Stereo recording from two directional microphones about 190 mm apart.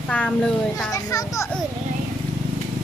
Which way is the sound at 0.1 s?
5° left (ahead or behind).